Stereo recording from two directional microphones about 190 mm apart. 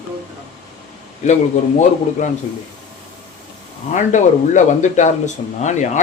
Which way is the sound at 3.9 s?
40° left (ahead or behind).